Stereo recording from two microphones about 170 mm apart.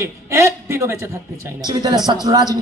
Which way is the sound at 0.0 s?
15° right (ahead or behind).